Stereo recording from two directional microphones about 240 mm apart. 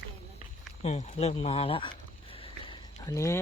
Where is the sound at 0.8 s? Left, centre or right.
Left.